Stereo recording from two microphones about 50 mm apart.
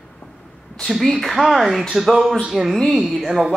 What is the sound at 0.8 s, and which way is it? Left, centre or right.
Speech, centre.